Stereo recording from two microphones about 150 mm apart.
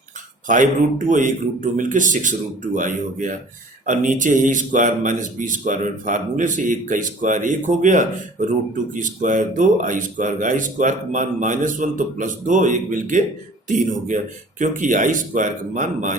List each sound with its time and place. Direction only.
0.4 s speech: 60° right (ahead or behind)